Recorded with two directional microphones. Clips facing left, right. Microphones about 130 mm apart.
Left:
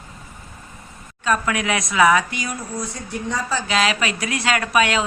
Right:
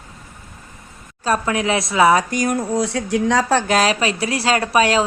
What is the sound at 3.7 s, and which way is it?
Speech, 40° right (ahead or behind).